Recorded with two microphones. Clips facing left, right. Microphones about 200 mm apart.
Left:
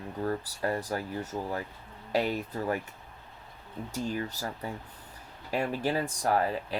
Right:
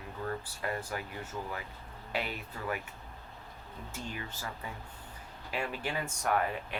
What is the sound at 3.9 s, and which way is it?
Speech, 40° left (ahead or behind).